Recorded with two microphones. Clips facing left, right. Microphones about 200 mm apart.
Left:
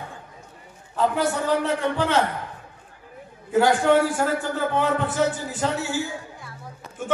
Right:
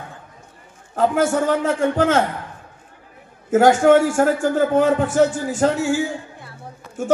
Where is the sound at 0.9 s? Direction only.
45° right (ahead or behind).